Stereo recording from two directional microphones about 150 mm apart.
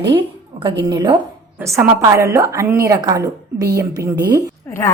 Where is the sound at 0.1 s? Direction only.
30° right (ahead or behind).